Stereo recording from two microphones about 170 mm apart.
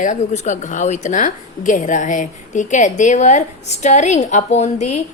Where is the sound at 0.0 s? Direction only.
45° left (ahead or behind).